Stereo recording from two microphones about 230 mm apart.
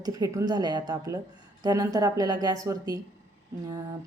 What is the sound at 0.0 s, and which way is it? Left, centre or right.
A woman's voice, centre.